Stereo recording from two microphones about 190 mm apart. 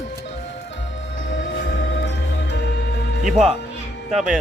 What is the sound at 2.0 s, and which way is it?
Music, 65° left (ahead or behind).